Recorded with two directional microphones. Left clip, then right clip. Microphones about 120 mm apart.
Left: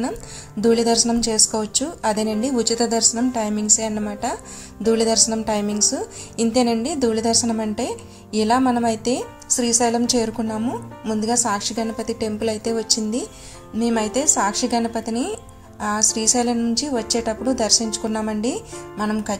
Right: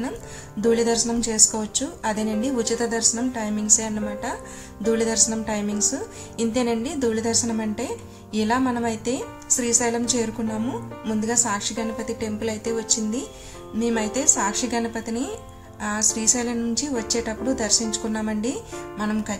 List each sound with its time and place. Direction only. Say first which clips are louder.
0.6 s a woman's voice: left 3 dB; 50° left (ahead or behind)
10.6 s a woman's voice: left 2 dB; 30° left (ahead or behind)